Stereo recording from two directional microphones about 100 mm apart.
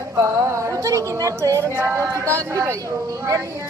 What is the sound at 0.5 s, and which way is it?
A woman's voice, 30° right (ahead or behind).